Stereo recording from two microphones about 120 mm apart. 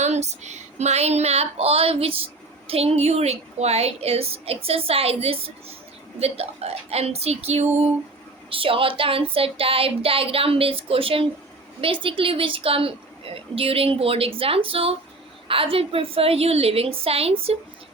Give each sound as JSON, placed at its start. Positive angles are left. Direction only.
{"t": 0.0, "sound": "child singing", "side_deg": -70}
{"t": 8.4, "sound": "a woman's voice", "side_deg": -50}